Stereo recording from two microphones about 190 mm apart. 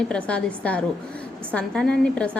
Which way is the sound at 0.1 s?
5° left (ahead or behind).